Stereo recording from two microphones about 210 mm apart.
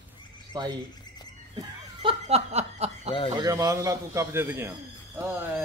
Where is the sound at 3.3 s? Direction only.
15° right (ahead or behind).